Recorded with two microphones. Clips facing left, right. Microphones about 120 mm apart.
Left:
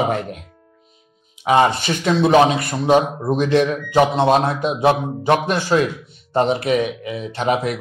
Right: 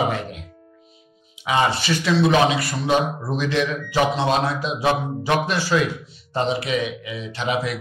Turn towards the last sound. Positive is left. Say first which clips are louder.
# left 4 dB
turn(degrees=50)  # may be behind; listen again after turning